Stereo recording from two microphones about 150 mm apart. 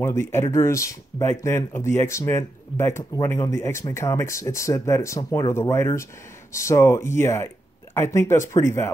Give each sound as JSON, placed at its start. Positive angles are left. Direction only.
{"t": 0.3, "sound": "speech", "side_deg": 15}